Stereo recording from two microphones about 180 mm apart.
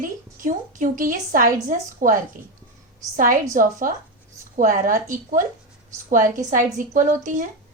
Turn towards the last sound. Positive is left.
turn(degrees=-45)  # may be behind; listen again after turning